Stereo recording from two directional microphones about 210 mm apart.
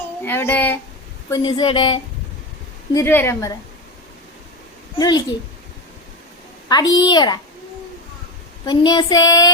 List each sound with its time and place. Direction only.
0.2 s a woman's voice: 10° left (ahead or behind)
1.3 s child singing: 20° left (ahead or behind)
2.9 s a woman's voice: 10° left (ahead or behind)
4.9 s child singing: 20° left (ahead or behind)
6.7 s child singing: 20° left (ahead or behind)
8.6 s child singing: 20° left (ahead or behind)